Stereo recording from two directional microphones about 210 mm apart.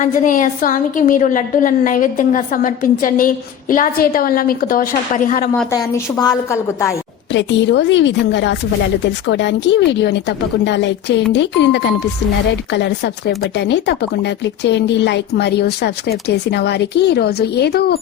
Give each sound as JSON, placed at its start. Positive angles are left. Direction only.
{"t": 0.0, "sound": "a woman's voice", "side_deg": 35}
{"t": 5.7, "sound": "a woman's voice", "side_deg": 15}
{"t": 7.3, "sound": "a woman's voice", "side_deg": 55}